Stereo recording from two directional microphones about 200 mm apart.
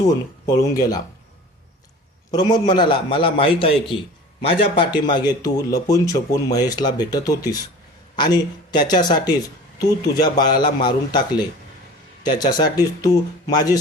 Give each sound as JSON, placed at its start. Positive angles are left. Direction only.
{"t": 0.4, "sound": "speech", "side_deg": 15}
{"t": 2.3, "sound": "speech", "side_deg": 20}
{"t": 12.5, "sound": "speech", "side_deg": 20}